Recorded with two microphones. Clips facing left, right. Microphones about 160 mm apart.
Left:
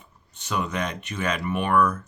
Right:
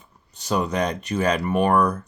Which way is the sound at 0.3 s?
35° right (ahead or behind).